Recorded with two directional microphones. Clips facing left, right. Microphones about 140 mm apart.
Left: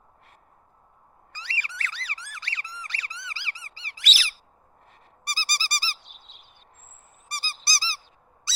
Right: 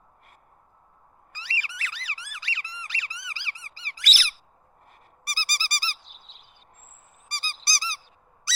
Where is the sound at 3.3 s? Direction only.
20° right (ahead or behind).